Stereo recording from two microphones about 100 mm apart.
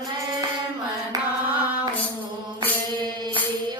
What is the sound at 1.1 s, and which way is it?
Carnatic music, 40° right (ahead or behind).